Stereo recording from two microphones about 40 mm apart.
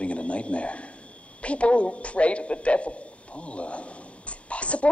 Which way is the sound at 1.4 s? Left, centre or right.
Left.